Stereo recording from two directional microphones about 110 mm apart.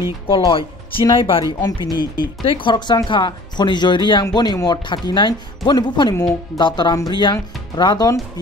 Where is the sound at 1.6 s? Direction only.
35° left (ahead or behind).